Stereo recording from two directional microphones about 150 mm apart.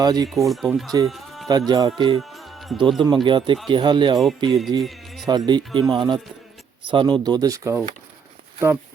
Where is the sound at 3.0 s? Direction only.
30° right (ahead or behind).